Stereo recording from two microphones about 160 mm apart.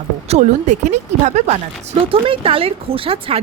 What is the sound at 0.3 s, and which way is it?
Speech, 45° right (ahead or behind).